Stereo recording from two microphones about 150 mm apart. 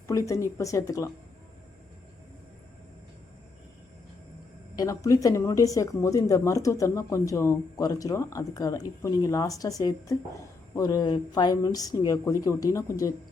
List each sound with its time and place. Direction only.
0.1 s speech: 20° left (ahead or behind)
4.7 s speech: 25° left (ahead or behind)